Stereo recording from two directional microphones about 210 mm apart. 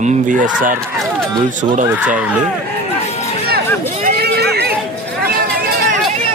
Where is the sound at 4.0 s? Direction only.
45° right (ahead or behind).